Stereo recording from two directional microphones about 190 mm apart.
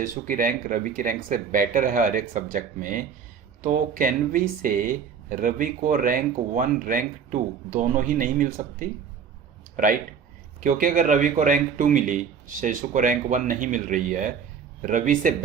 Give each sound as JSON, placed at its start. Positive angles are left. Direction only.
{"t": 0.0, "sound": "speech", "side_deg": -45}